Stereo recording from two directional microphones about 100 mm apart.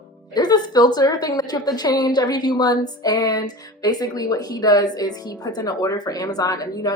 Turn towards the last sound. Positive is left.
turn(degrees=40)  # may be behind; listen again after turning